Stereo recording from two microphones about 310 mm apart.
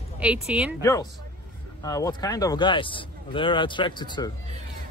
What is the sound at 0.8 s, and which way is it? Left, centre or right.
Speech, centre.